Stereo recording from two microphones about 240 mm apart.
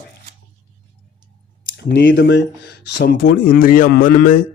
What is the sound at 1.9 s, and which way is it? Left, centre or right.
Speech, left.